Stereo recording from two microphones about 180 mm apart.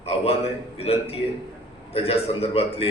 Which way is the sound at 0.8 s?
35° left (ahead or behind).